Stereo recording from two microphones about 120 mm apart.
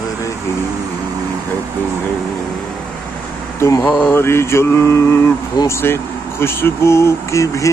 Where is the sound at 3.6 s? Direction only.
25° left (ahead or behind).